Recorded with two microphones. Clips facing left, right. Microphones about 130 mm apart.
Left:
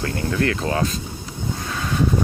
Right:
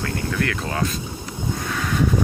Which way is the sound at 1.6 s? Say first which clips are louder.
Right 1 dB; 25° left (ahead or behind).